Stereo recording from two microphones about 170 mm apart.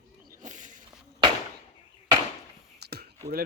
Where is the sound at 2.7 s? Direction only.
70° right (ahead or behind).